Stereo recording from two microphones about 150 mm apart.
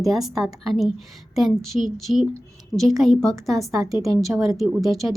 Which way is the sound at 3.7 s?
20° right (ahead or behind).